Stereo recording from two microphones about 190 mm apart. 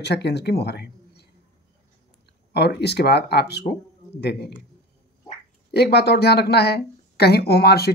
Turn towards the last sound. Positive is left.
turn(degrees=55)  # may be behind; listen again after turning